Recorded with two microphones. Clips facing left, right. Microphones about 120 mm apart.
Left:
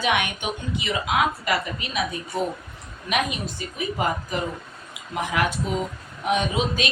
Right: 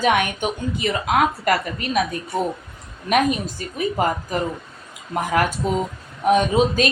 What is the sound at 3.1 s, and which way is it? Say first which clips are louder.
Speech: right 7 dB; 45° right (ahead or behind).